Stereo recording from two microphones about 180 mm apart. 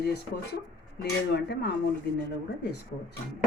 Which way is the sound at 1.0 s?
70° left (ahead or behind).